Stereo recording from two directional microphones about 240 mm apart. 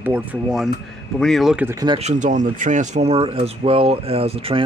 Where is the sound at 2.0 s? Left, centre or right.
Right.